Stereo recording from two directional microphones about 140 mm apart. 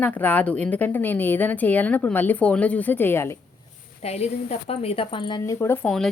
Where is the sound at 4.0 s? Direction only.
50° left (ahead or behind); by 5.4 s 35° left (ahead or behind).